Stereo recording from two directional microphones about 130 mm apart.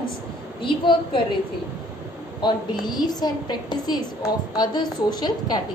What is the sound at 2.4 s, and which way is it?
A woman's voice, 30° left (ahead or behind).